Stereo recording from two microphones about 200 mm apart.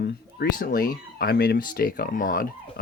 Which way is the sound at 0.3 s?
45° left (ahead or behind).